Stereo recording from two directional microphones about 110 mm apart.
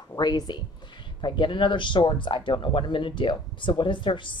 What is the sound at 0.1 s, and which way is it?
Speech, 40° left (ahead or behind).